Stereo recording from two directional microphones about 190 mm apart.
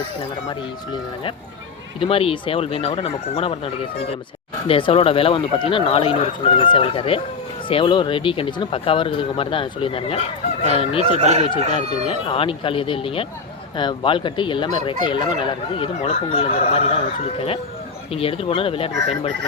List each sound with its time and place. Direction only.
2.0 s speech: 30° left (ahead or behind)
4.7 s speech: 30° left (ahead or behind)
11.2 s speech: 35° right (ahead or behind)
12.0 s speech: 30° left (ahead or behind)
18.1 s speech: 30° left (ahead or behind)